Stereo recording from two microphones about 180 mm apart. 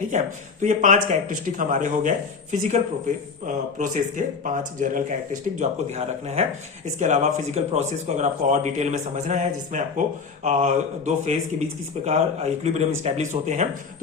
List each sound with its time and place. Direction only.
0.1 s speech: 40° right (ahead or behind)